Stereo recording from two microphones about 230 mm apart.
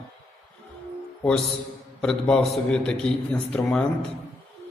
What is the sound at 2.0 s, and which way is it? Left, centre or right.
A man's voice, centre.